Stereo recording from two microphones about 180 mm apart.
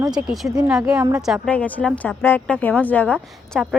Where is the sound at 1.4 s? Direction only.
10° left (ahead or behind).